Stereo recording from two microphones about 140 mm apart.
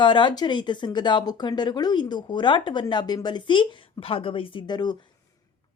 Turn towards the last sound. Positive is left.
turn(degrees=30)  # may be behind; listen again after turning